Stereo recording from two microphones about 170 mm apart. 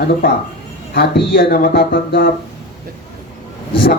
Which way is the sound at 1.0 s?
70° left (ahead or behind).